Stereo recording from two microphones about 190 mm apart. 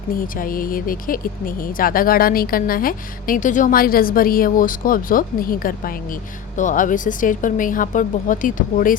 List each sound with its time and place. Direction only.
0.1 s speech: 50° left (ahead or behind)